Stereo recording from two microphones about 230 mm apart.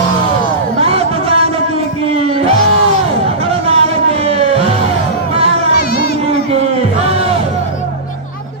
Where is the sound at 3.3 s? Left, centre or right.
Right.